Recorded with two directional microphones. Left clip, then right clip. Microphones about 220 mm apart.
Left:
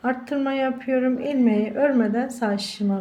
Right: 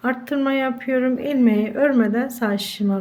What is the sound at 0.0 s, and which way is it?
A woman's voice, 15° right (ahead or behind).